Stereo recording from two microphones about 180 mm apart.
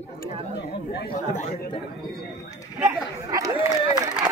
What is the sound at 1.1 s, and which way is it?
Speech, 45° left (ahead or behind).